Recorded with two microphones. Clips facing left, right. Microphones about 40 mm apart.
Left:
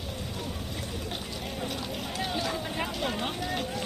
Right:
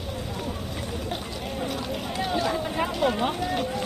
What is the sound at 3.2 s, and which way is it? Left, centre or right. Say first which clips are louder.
Run: right 6 dB; centre.